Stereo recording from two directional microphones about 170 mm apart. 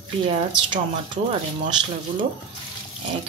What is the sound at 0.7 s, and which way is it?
Speech, 30° right (ahead or behind).